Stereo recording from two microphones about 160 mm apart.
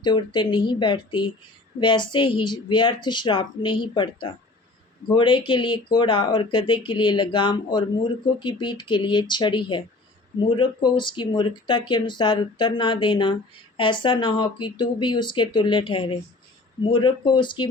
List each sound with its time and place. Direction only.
0.0 s speech: 30° left (ahead or behind)